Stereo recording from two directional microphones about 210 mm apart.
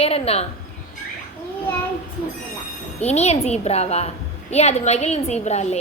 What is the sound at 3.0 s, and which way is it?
A child's voice, 30° left (ahead or behind).